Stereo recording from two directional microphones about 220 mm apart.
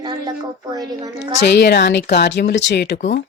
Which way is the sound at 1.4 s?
50° left (ahead or behind).